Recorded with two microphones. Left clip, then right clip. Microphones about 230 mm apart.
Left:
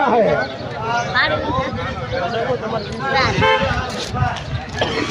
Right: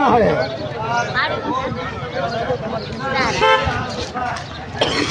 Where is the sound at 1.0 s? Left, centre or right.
Left.